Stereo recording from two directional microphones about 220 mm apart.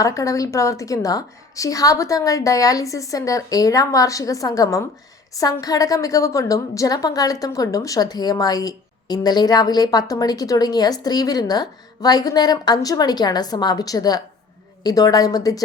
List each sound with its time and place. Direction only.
0.0 s a woman's voice: 15° left (ahead or behind)